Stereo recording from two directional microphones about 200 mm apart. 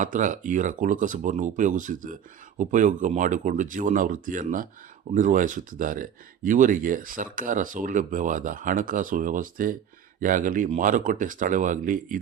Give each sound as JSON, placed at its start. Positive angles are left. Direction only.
{"t": 0.0, "sound": "speech", "side_deg": -40}